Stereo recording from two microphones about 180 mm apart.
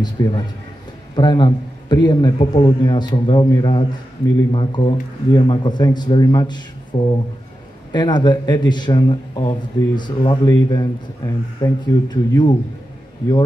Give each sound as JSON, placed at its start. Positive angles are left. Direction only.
{"t": 0.0, "sound": "a man's voice", "side_deg": 25}